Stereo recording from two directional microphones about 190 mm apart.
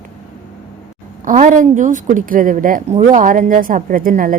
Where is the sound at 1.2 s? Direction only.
40° right (ahead or behind).